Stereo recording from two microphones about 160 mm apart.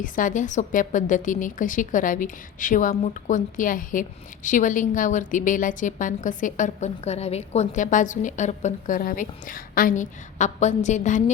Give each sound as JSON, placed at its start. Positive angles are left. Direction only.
{"t": 0.0, "sound": "a woman's voice", "side_deg": 55}